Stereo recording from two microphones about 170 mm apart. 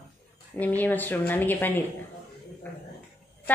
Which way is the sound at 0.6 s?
10° left (ahead or behind).